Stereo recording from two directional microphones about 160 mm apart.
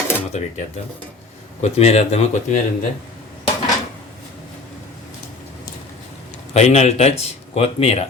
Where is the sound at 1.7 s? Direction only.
40° left (ahead or behind).